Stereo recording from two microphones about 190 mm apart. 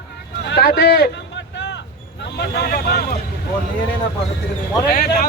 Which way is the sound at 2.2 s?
60° left (ahead or behind).